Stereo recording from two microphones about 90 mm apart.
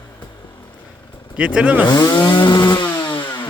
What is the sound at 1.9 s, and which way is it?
Chainsaw, 45° left (ahead or behind).